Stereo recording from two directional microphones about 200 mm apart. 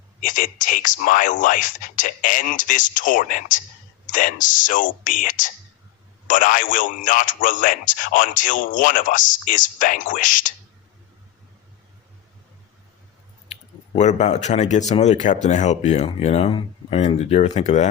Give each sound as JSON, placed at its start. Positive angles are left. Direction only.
{"t": 0.2, "sound": "speech", "side_deg": 40}
{"t": 13.5, "sound": "speech", "side_deg": 35}